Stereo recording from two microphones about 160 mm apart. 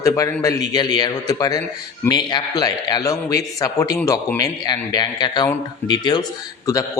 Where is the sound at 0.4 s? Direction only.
25° left (ahead or behind).